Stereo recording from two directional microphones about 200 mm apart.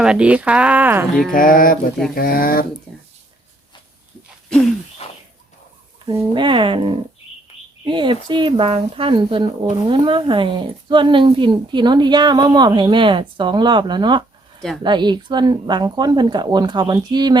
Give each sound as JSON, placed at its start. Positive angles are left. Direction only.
{"t": 0.0, "sound": "speech", "side_deg": -5}
{"t": 1.3, "sound": "speech", "side_deg": 45}
{"t": 6.1, "sound": "speech", "side_deg": -20}